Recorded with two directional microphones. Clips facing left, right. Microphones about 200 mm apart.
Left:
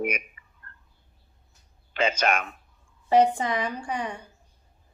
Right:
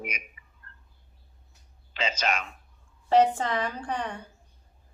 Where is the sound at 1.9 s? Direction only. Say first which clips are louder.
Left 5 dB; 55° left (ahead or behind).